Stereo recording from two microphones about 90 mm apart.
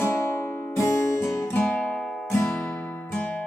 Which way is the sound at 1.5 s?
15° left (ahead or behind).